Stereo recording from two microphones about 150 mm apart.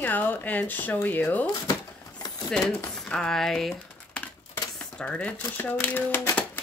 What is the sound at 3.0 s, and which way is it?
Speech, 5° left (ahead or behind).